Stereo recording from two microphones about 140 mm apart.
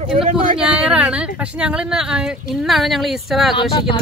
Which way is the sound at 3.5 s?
40° left (ahead or behind).